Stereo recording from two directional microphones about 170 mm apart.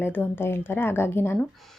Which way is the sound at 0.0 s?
15° left (ahead or behind).